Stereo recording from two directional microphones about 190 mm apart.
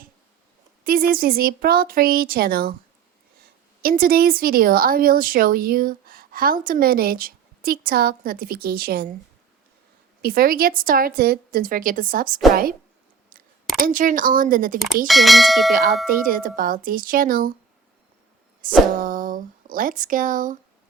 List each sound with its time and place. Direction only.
0.9 s speech: 50° right (ahead or behind)
3.8 s speech: 50° right (ahead or behind)
10.2 s speech: 50° right (ahead or behind)
13.3 s a sound: 45° right (ahead or behind)
13.7 s speech: 45° right (ahead or behind)
15.0 s speech: centre (ahead or behind)
15.7 s speech: 50° right (ahead or behind)
18.9 s speech: 45° right (ahead or behind)